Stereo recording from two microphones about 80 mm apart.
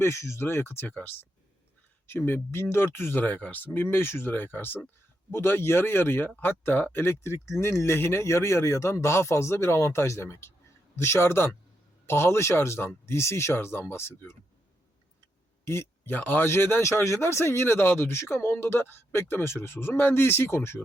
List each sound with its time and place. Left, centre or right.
0.0 s speech: left
2.0 s a man's voice: left
15.6 s a man's voice: left